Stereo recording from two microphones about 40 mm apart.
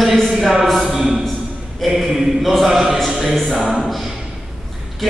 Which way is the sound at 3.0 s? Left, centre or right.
Centre.